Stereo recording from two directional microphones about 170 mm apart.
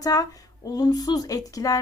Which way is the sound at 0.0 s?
20° left (ahead or behind).